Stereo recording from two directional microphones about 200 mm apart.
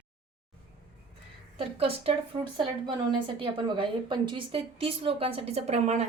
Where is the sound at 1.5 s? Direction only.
30° right (ahead or behind).